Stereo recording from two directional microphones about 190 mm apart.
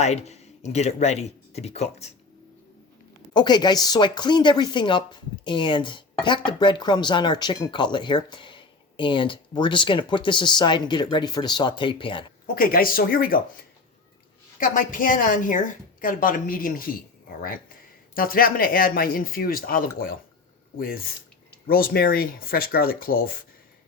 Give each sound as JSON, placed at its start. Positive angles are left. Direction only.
{"t": 0.0, "sound": "speech", "side_deg": 35}
{"t": 3.3, "sound": "speech", "side_deg": 20}
{"t": 12.5, "sound": "a woman's voice", "side_deg": 50}
{"t": 14.6, "sound": "a woman's voice", "side_deg": 45}
{"t": 18.1, "sound": "a woman's voice", "side_deg": 50}